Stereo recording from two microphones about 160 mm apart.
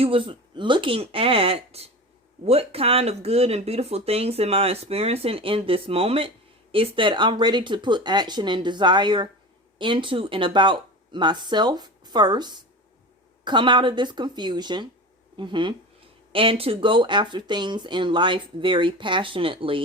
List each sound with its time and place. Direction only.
0.0 s speech: 35° right (ahead or behind)